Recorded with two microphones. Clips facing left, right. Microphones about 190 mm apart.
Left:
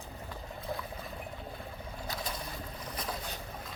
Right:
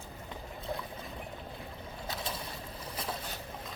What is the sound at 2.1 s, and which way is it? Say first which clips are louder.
Boat: even; 25° right (ahead or behind).